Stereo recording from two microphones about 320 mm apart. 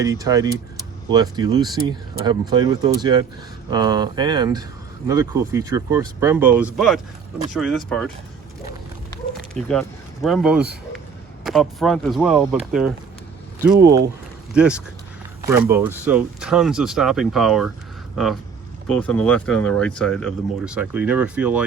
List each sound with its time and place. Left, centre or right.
0.0 s speech: centre
9.6 s speech: centre
18.9 s speech: centre